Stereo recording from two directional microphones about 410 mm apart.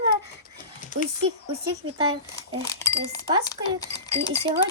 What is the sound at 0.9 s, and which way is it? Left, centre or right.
Speech, centre.